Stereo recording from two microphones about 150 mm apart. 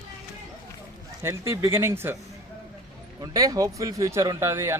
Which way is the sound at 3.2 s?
25° right (ahead or behind).